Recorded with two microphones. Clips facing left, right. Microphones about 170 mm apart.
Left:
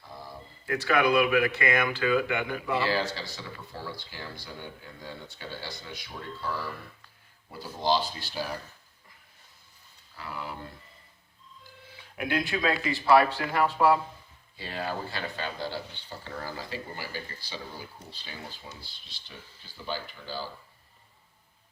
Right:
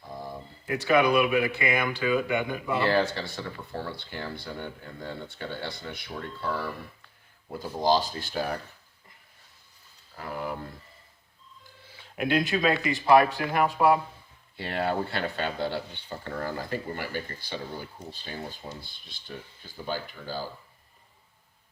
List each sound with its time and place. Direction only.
0.6 s speech: 20° right (ahead or behind)
2.7 s speech: 55° right (ahead or behind)
7.8 s speech: 45° right (ahead or behind)
10.2 s a sound: 50° right (ahead or behind)
12.1 s speech: 25° right (ahead or behind)
14.5 s speech: 60° right (ahead or behind); by 20.5 s 45° right (ahead or behind)